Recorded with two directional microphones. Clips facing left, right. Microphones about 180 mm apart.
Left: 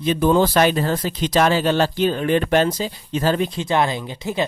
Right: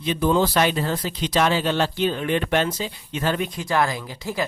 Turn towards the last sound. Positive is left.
turn(degrees=25)  # may be behind; listen again after turning